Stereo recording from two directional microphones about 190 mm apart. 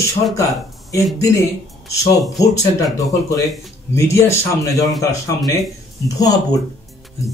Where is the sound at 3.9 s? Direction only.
15° left (ahead or behind).